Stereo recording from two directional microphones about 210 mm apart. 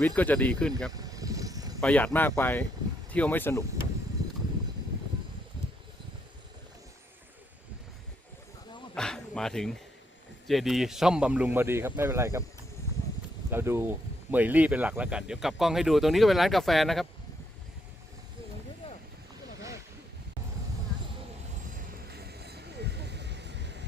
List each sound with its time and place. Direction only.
0.0 s speech: 5° left (ahead or behind)
0.9 s vehicle: 15° right (ahead or behind)
1.8 s speech: 5° left (ahead or behind)
9.0 s a sound: 5° left (ahead or behind)
10.4 s speech: centre (ahead or behind)
13.5 s speech: 10° right (ahead or behind)
22.3 s vehicle: 50° right (ahead or behind)